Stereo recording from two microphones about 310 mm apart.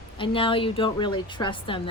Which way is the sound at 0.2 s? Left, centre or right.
Centre.